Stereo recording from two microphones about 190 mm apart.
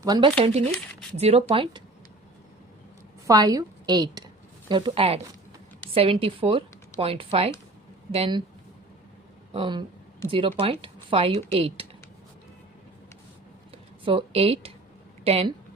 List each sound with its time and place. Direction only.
0.0 s speech: 25° right (ahead or behind)
3.2 s a woman's voice: 20° right (ahead or behind)
9.5 s speech: 25° right (ahead or behind)
14.0 s speech: 25° right (ahead or behind)